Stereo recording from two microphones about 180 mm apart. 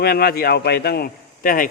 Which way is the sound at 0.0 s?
60° left (ahead or behind).